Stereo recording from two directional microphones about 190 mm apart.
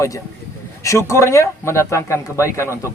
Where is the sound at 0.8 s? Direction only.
15° left (ahead or behind).